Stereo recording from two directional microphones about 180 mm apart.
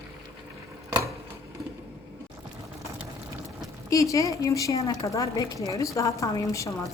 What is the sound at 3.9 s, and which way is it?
A woman's voice, 20° left (ahead or behind).